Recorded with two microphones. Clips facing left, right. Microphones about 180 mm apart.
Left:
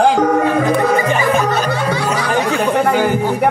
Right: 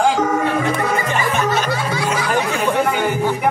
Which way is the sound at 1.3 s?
35° left (ahead or behind).